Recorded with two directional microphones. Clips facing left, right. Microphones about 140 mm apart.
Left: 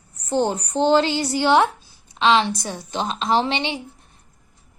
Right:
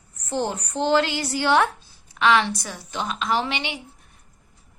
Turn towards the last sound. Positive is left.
turn(degrees=30)  # may be behind; listen again after turning